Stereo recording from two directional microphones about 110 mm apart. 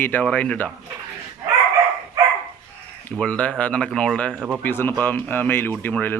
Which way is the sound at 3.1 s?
10° left (ahead or behind).